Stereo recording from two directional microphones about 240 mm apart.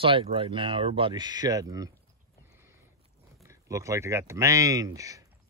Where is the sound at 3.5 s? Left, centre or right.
Centre.